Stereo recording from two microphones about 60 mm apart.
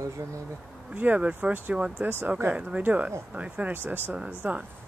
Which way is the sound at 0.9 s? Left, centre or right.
Right.